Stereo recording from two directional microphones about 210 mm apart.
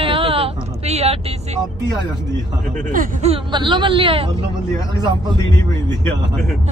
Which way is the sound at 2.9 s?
30° right (ahead or behind).